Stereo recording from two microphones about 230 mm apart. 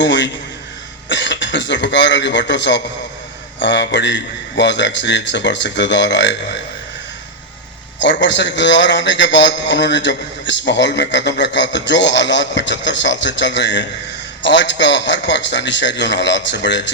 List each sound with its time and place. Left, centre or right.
0.0 s a man's voice: left
8.2 s a man's voice: left